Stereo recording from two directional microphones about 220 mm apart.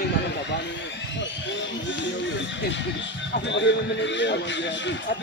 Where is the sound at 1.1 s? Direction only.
55° left (ahead or behind).